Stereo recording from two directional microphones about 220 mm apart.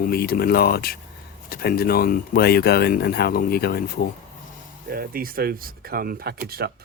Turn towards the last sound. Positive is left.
turn(degrees=-45)  # may be behind; listen again after turning